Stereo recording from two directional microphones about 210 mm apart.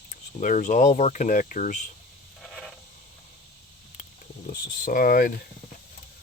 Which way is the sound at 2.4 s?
Centre (ahead or behind).